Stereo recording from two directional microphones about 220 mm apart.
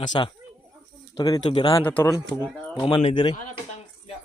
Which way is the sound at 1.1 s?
20° left (ahead or behind).